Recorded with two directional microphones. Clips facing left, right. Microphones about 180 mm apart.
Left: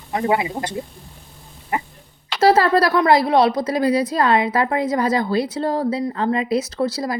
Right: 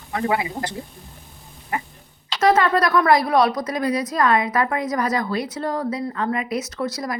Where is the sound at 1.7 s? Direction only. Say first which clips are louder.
Left 3 dB; 20° left (ahead or behind).